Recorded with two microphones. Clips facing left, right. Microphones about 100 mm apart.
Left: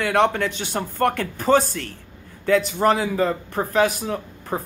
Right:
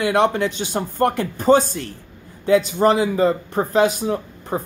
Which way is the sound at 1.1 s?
20° right (ahead or behind).